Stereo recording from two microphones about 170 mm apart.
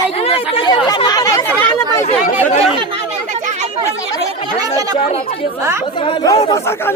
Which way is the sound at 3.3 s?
45° right (ahead or behind).